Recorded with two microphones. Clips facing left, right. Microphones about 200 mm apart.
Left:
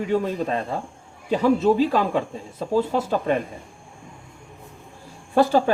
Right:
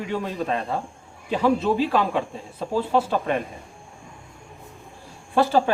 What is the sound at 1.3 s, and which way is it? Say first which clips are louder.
Speech: left 3 dB; 40° left (ahead or behind).